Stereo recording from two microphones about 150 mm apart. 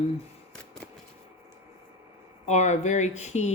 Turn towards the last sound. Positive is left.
turn(degrees=50)  # may be behind; listen again after turning